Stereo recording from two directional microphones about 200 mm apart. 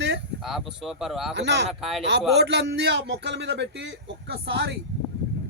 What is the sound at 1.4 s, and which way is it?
Speech, 60° right (ahead or behind).